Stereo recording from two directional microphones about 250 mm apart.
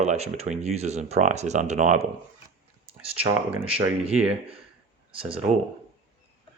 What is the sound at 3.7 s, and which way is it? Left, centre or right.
Speech, right.